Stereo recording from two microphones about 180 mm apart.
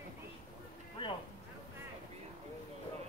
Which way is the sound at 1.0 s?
25° left (ahead or behind).